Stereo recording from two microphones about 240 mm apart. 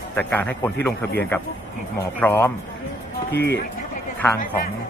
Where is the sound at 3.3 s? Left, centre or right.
Left.